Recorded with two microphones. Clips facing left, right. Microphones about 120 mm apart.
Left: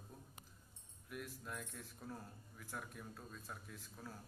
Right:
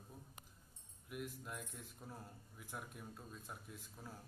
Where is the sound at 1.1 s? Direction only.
15° right (ahead or behind).